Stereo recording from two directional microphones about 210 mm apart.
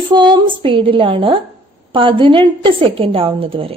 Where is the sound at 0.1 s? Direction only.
20° right (ahead or behind).